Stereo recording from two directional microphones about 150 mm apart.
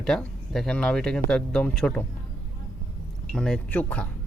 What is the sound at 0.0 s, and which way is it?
Speech, 5° left (ahead or behind).